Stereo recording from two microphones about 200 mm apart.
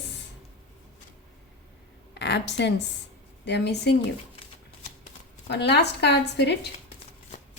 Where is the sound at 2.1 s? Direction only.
60° left (ahead or behind).